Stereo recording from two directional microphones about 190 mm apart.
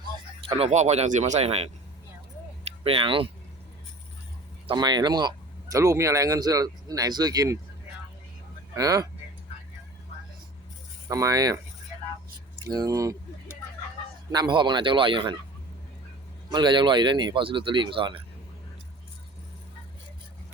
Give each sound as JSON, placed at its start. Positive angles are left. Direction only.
{"t": 0.4, "sound": "speech", "side_deg": -35}
{"t": 2.8, "sound": "speech", "side_deg": -30}
{"t": 4.6, "sound": "speech", "side_deg": -25}
{"t": 8.7, "sound": "speech", "side_deg": -20}
{"t": 11.1, "sound": "speech", "side_deg": -20}
{"t": 12.6, "sound": "speech", "side_deg": -20}
{"t": 14.3, "sound": "speech", "side_deg": -20}
{"t": 16.5, "sound": "speech", "side_deg": -25}